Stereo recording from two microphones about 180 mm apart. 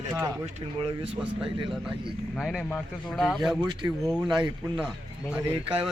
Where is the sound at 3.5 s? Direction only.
25° right (ahead or behind).